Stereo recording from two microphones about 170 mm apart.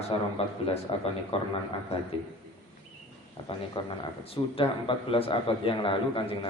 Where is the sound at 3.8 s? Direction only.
30° left (ahead or behind).